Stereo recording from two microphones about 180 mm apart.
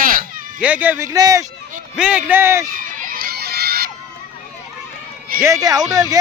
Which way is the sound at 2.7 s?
50° right (ahead or behind).